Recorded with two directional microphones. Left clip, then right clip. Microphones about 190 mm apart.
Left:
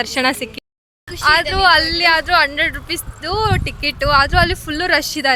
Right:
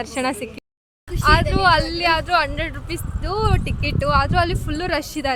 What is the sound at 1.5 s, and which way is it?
Speech, 5° left (ahead or behind).